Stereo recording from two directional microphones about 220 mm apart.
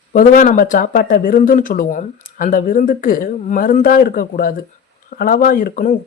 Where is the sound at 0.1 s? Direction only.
40° left (ahead or behind).